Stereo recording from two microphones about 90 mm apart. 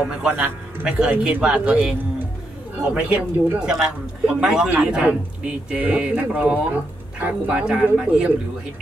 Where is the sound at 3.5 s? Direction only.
5° right (ahead or behind).